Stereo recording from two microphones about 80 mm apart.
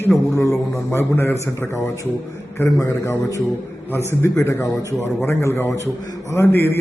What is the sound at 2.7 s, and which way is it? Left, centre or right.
A man's voice, left.